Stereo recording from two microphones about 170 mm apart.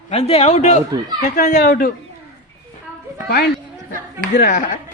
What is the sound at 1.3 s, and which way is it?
Speech, 65° left (ahead or behind).